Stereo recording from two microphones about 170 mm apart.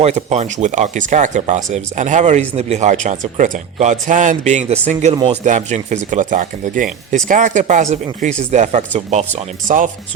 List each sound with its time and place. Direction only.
0.0 s speech: 40° right (ahead or behind)